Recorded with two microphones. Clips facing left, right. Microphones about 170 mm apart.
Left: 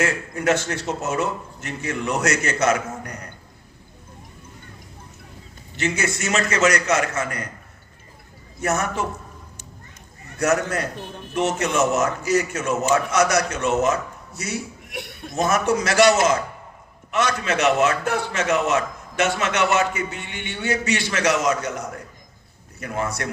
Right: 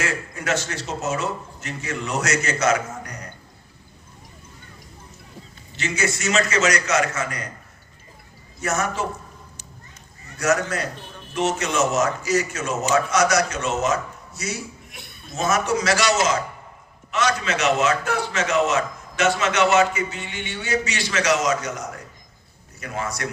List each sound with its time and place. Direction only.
0.0 s a man's voice: 55° left (ahead or behind)
5.7 s a man's voice: 55° left (ahead or behind)
8.6 s a man's voice: 55° left (ahead or behind)
10.3 s a man's voice: 55° left (ahead or behind)